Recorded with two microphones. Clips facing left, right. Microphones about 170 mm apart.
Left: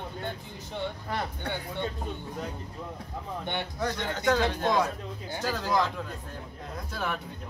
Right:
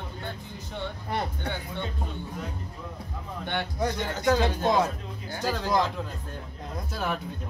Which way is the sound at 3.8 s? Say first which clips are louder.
Right 2 dB; 10° right (ahead or behind).